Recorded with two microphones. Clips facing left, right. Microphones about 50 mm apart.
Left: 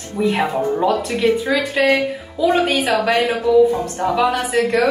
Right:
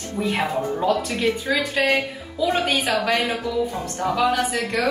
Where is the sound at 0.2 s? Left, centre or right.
Left.